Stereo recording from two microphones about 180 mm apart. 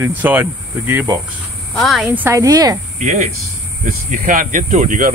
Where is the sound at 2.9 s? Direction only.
40° right (ahead or behind).